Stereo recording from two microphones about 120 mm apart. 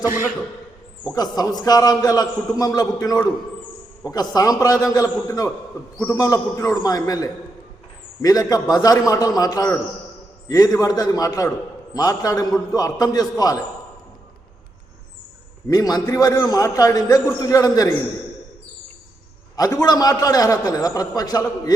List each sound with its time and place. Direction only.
0.0 s a man's voice: 20° right (ahead or behind)
1.1 s a man's voice: 35° left (ahead or behind)
4.4 s a man's voice: 30° left (ahead or behind)
15.7 s a man's voice: 30° left (ahead or behind)
19.5 s a man's voice: 30° left (ahead or behind)